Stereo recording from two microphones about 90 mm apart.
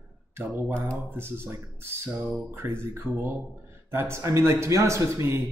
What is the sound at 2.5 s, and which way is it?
Speech, 30° right (ahead or behind).